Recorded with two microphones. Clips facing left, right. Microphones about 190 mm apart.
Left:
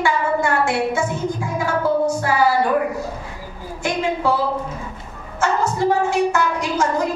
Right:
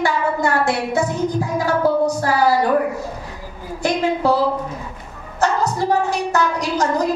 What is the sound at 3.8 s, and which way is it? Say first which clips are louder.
Speech: right 2 dB; 40° right (ahead or behind).